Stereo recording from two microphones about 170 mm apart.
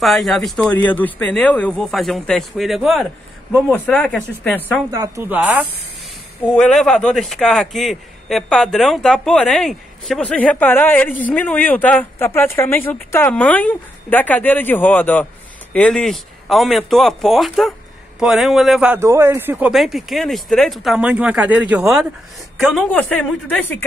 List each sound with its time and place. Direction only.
0.0 s speech: centre (ahead or behind)
4.9 s a woman's voice: 20° right (ahead or behind)
6.4 s speech: 5° left (ahead or behind)
18.9 s speech: 15° right (ahead or behind); by 23.7 s 10° left (ahead or behind)